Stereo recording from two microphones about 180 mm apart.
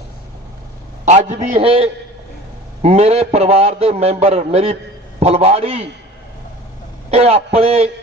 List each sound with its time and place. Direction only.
1.0 s a man's voice: 40° right (ahead or behind)
1.6 s a man's voice: 30° right (ahead or behind)
7.1 s a man's voice: 35° right (ahead or behind)